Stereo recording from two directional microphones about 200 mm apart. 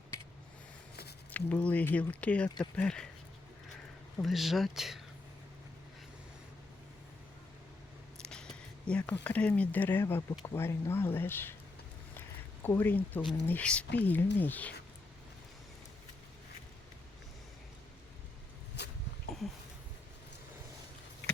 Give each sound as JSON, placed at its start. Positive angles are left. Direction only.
{"t": 1.3, "sound": "speech", "side_deg": 5}
{"t": 4.2, "sound": "speech", "side_deg": 0}
{"t": 8.9, "sound": "speech", "side_deg": 5}
{"t": 12.6, "sound": "speech", "side_deg": 10}
{"t": 18.8, "sound": "a sound", "side_deg": 55}